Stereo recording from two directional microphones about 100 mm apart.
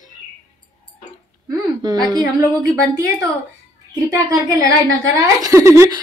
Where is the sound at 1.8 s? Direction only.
40° right (ahead or behind).